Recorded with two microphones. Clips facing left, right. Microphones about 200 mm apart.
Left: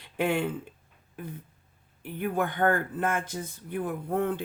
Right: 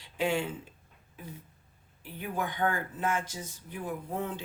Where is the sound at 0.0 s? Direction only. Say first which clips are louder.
Left 3 dB; 55° left (ahead or behind).